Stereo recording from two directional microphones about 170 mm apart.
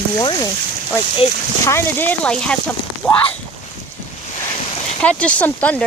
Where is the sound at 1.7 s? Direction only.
15° left (ahead or behind).